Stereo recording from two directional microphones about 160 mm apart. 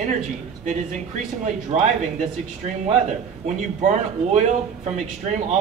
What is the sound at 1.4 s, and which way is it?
Speech, 50° right (ahead or behind).